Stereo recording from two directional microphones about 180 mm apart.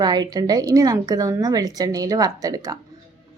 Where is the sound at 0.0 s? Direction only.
20° right (ahead or behind).